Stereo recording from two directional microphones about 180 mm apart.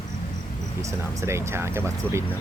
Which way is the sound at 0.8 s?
15° right (ahead or behind).